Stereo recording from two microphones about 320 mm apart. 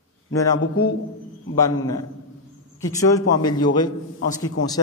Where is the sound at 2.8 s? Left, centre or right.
Centre.